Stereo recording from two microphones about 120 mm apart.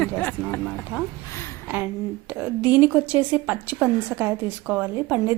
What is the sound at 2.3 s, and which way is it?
A woman's voice, 15° right (ahead or behind).